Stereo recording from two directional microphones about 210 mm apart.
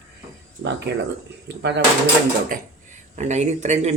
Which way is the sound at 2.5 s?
40° right (ahead or behind).